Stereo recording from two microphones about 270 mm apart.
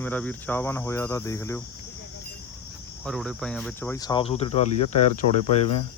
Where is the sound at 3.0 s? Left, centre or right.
Centre; by 5.0 s left.